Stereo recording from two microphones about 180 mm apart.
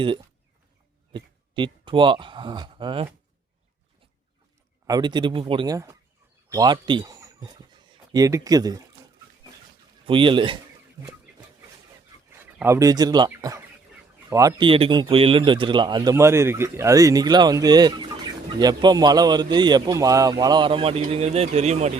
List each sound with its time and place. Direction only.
1.1 s speech: 25° right (ahead or behind)
4.9 s speech: 25° right (ahead or behind)
10.1 s speech: 30° right (ahead or behind)
12.5 s speech: 15° right (ahead or behind); by 21.9 s 40° right (ahead or behind)